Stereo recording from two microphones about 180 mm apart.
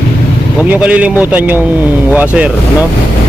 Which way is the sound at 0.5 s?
10° right (ahead or behind).